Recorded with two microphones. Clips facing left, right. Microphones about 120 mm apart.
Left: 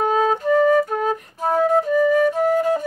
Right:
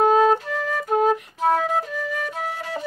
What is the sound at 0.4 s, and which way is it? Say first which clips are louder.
Flute: left 12 dB; 45° left (ahead or behind).